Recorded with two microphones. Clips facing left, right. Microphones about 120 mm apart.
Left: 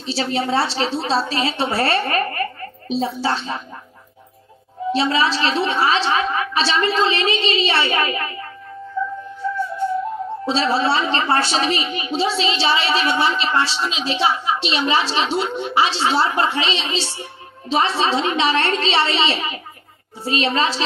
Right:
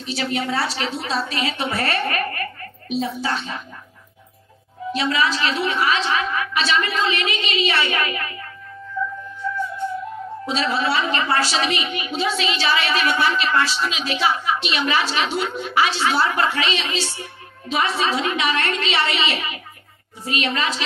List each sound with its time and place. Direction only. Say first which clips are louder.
0.0 s a woman's voice: left 3 dB; 30° left (ahead or behind)
4.9 s a woman's voice: left 2 dB; 30° left (ahead or behind)
9.0 s music: left 3 dB; 30° left (ahead or behind)
10.4 s a woman's voice: left 3 dB; 30° left (ahead or behind)